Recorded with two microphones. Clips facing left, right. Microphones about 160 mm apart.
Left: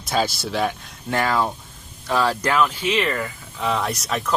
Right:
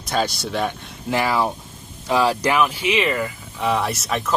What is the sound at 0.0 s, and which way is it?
Speech, centre (ahead or behind).